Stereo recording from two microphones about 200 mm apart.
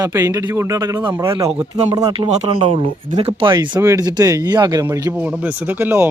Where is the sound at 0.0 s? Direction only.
15° right (ahead or behind).